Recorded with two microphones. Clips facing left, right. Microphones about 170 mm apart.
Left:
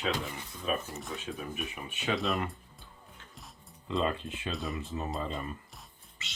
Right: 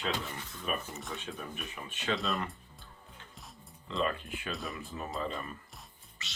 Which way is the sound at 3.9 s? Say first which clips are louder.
Left 2 dB; 20° left (ahead or behind).